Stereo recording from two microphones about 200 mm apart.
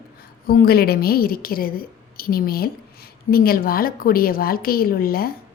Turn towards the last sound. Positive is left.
turn(degrees=50)  # may be behind; listen again after turning